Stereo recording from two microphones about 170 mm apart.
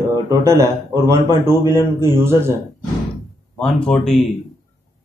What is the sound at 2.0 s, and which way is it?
Speech, 15° right (ahead or behind).